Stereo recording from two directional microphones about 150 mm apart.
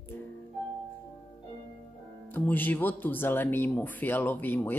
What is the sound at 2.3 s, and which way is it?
Speech, 10° left (ahead or behind).